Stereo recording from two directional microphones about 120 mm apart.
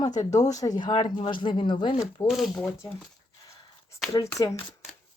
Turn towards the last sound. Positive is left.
turn(degrees=30)  # may be behind; listen again after turning